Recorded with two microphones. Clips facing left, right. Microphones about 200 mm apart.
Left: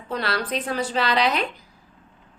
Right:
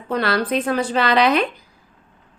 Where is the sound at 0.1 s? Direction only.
55° right (ahead or behind).